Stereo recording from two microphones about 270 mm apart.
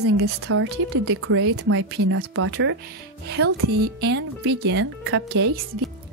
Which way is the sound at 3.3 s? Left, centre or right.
Right.